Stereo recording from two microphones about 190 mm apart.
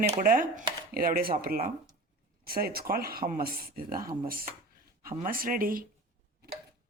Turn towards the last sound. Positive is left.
turn(degrees=-50)  # may be behind; listen again after turning